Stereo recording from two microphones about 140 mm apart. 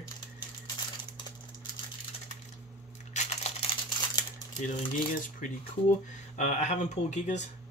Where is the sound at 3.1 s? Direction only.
55° left (ahead or behind).